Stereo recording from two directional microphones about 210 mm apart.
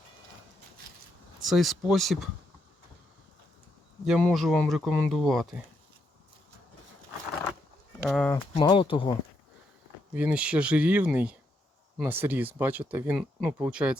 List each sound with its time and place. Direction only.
1.4 s speech: centre (ahead or behind)
4.0 s speech: centre (ahead or behind)
8.0 s speech: 5° left (ahead or behind)
8.5 s speech: 25° left (ahead or behind)
10.1 s speech: 5° right (ahead or behind)